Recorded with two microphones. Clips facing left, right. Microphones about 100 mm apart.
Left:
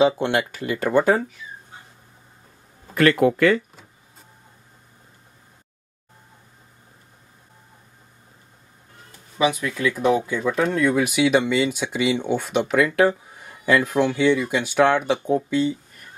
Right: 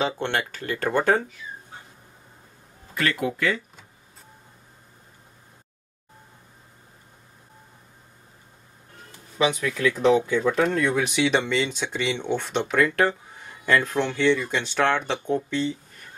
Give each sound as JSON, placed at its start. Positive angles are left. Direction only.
{"t": 0.0, "sound": "speech", "side_deg": 15}
{"t": 2.9, "sound": "speech", "side_deg": 55}
{"t": 9.4, "sound": "speech", "side_deg": 5}